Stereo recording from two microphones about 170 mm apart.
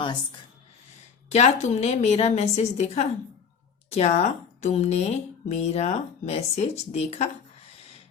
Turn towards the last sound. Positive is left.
turn(degrees=40)  # may be behind; listen again after turning